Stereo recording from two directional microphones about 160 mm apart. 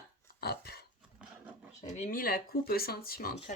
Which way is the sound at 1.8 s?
50° left (ahead or behind).